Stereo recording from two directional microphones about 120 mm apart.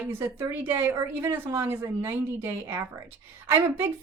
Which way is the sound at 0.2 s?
20° right (ahead or behind).